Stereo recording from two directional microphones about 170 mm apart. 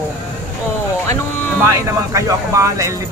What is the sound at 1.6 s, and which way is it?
Speech, 20° right (ahead or behind).